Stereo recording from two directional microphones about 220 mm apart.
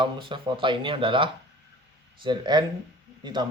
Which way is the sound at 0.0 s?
20° right (ahead or behind).